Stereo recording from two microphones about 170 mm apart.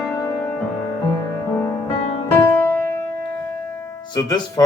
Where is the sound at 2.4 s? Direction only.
15° left (ahead or behind).